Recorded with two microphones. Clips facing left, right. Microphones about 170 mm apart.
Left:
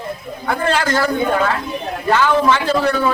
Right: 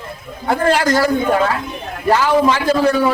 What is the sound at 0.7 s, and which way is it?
Speech, 10° right (ahead or behind).